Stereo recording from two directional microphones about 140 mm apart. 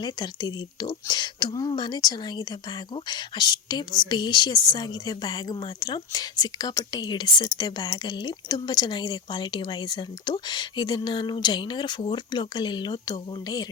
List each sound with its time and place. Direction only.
0.0 s a woman's voice: 30° left (ahead or behind)